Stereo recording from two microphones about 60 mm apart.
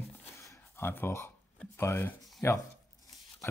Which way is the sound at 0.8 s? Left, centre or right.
Left.